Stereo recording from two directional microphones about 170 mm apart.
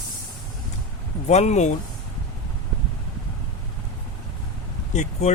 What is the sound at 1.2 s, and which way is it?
Speech, 40° left (ahead or behind).